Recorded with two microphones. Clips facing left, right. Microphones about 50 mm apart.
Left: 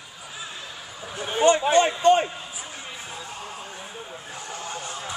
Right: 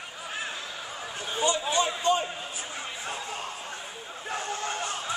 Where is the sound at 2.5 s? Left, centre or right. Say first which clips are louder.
Right 1 dB; right.